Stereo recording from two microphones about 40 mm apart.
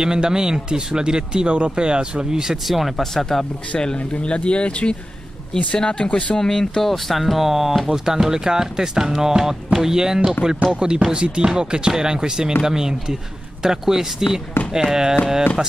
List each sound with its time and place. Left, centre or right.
0.0 s speech: centre
3.0 s speech: centre
3.7 s speech: left
6.0 s speech: left
6.3 s speech: centre